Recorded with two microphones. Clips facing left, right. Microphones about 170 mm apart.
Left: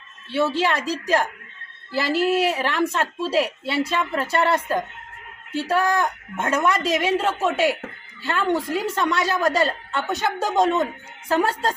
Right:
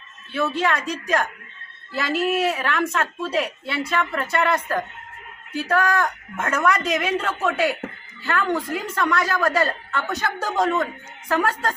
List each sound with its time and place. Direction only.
0.5 s a woman's voice: 30° left (ahead or behind)